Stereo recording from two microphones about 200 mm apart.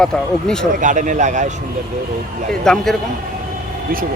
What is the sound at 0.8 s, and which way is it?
Speech, 40° right (ahead or behind).